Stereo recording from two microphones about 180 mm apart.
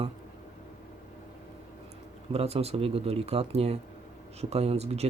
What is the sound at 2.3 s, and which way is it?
Speech, 35° right (ahead or behind).